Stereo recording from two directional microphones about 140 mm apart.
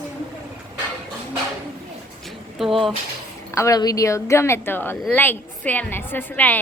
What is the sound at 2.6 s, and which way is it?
Speech, centre (ahead or behind).